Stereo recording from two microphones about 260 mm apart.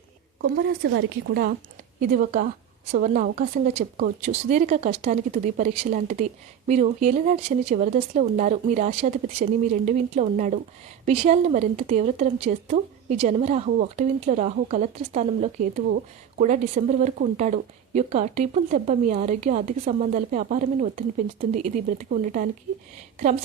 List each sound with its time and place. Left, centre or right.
0.4 s a woman's voice: right